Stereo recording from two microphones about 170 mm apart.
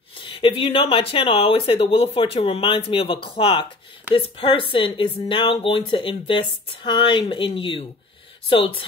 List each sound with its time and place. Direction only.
0.2 s speech: 30° left (ahead or behind)